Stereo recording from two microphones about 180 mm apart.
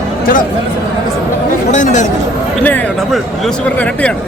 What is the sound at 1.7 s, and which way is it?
Speech, 45° left (ahead or behind).